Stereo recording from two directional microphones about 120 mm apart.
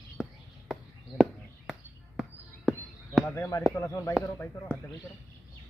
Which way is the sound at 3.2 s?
20° left (ahead or behind).